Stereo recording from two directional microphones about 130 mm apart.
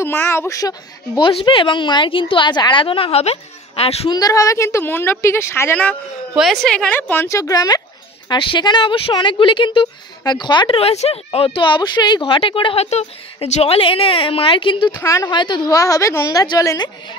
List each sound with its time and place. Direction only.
0.0 s a woman's voice: 20° left (ahead or behind)
1.3 s a woman's voice: 40° left (ahead or behind)
4.1 s a woman's voice: 25° left (ahead or behind)
6.3 s a woman's voice: centre (ahead or behind); by 10.8 s 35° left (ahead or behind)
10.8 s a woman's voice: 50° left (ahead or behind)
12.8 s a woman's voice: 60° left (ahead or behind); by 14.9 s 40° left (ahead or behind)
15.0 s a woman's voice: 25° left (ahead or behind)